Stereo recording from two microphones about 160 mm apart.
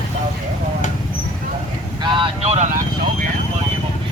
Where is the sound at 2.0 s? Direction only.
30° right (ahead or behind).